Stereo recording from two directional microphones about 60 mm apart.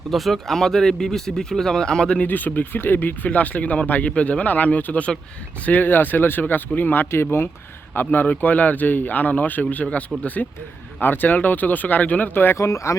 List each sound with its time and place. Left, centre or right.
0.1 s speech: centre
2.2 s a man's voice: left
11.0 s a man's voice: left
12.5 s speech: left